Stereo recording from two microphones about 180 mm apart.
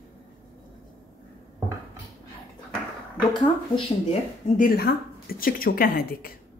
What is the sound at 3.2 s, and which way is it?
Speech, 25° left (ahead or behind).